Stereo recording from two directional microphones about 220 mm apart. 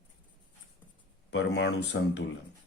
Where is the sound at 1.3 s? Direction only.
50° left (ahead or behind).